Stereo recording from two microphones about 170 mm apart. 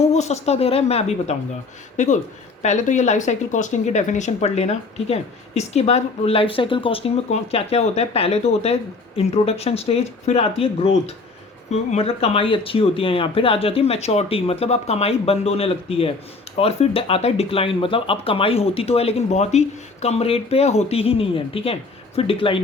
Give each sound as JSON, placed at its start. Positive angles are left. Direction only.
{"t": 0.1, "sound": "speech", "side_deg": 40}